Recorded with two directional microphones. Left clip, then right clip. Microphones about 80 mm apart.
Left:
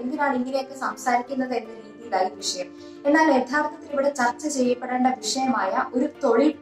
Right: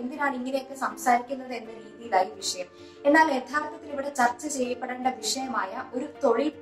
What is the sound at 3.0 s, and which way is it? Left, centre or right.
A child's voice, left.